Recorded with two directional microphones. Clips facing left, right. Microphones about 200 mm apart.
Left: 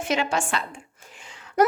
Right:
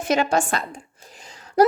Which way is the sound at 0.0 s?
40° right (ahead or behind).